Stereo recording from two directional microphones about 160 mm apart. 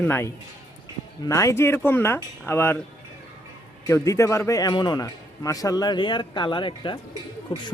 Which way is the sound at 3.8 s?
20° left (ahead or behind).